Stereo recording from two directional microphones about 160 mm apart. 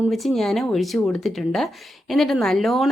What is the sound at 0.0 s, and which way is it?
Speech, centre (ahead or behind).